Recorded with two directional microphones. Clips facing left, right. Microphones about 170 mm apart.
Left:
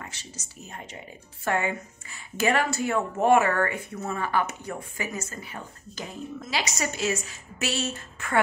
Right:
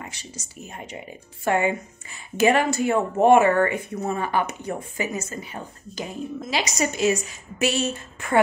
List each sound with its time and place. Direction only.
0.0 s a woman's voice: 15° right (ahead or behind)